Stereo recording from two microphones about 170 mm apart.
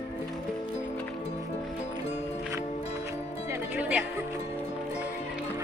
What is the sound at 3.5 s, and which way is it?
Music, 10° right (ahead or behind).